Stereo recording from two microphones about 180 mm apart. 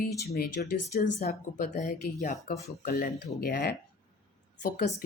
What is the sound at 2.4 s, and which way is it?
Speech, 60° left (ahead or behind).